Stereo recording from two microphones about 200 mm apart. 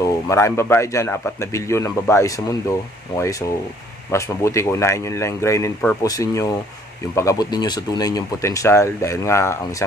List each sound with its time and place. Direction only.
0.0 s speech: 15° left (ahead or behind)